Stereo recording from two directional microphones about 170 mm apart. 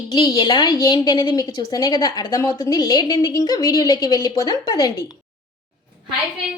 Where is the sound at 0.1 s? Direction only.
25° left (ahead or behind).